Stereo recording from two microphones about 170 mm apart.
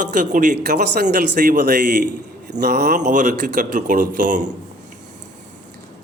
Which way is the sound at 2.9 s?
45° right (ahead or behind).